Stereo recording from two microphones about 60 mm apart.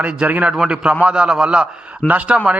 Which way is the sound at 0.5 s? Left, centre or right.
Centre.